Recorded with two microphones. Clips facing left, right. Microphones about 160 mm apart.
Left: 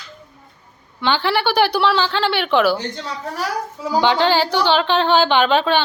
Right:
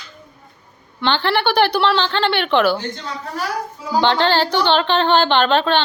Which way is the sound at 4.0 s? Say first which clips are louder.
Even; 10° left (ahead or behind).